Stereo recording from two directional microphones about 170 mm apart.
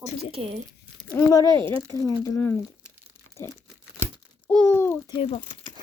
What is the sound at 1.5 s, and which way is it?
Speech, 30° right (ahead or behind).